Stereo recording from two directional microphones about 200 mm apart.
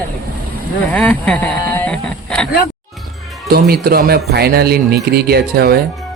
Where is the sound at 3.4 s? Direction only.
50° right (ahead or behind).